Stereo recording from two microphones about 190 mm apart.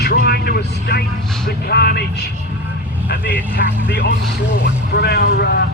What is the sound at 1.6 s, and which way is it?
Speech, 55° left (ahead or behind).